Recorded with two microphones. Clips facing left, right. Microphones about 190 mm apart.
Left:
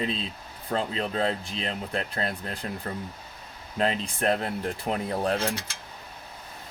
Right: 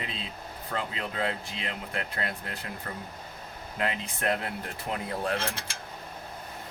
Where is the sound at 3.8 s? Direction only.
30° left (ahead or behind).